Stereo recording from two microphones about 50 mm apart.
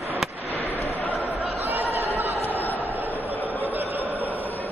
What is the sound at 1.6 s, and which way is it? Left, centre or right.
Chatter, right.